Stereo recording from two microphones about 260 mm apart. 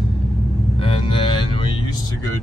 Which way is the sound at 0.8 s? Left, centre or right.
Left.